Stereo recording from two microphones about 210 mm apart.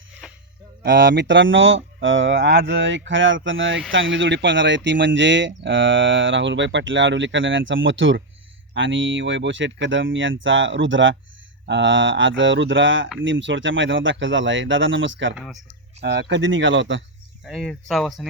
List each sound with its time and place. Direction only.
0.2 s a sound: 5° right (ahead or behind)
0.8 s speech: 55° right (ahead or behind)
15.4 s speech: centre (ahead or behind)
16.0 s speech: 55° right (ahead or behind)
17.4 s speech: centre (ahead or behind)